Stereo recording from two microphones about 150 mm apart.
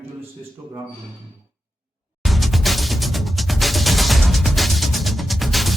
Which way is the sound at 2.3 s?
Centre (ahead or behind).